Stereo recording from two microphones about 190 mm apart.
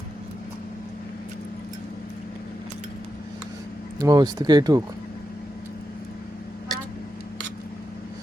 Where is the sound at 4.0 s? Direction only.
20° right (ahead or behind).